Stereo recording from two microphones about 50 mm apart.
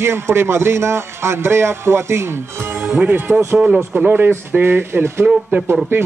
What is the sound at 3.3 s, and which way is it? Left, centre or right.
Speech, right.